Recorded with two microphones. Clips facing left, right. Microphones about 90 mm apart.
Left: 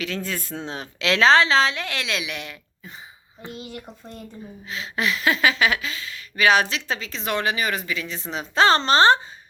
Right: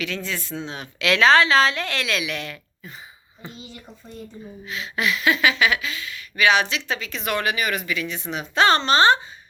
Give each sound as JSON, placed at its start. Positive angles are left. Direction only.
{"t": 0.0, "sound": "a woman's voice", "side_deg": 40}
{"t": 3.5, "sound": "speech", "side_deg": 60}
{"t": 4.6, "sound": "speech", "side_deg": 35}